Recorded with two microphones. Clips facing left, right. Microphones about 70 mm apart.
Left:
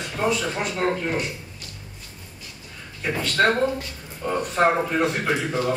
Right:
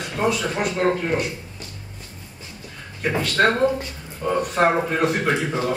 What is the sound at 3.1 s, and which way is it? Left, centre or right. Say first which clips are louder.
A man's voice: right 1 dB; centre.